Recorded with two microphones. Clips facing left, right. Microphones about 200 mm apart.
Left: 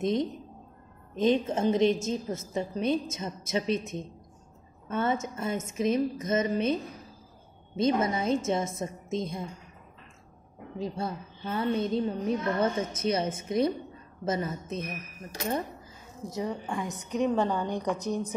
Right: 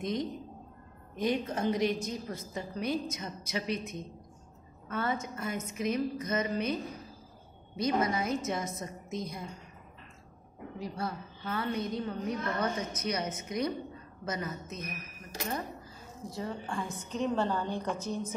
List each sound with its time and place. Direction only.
0.0 s a woman's voice: 25° left (ahead or behind)
10.8 s a woman's voice: 25° left (ahead or behind)
16.3 s a woman's voice: 20° left (ahead or behind)